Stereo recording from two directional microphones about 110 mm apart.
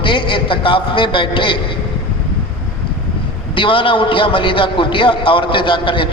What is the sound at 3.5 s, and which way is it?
A man's voice, 50° left (ahead or behind).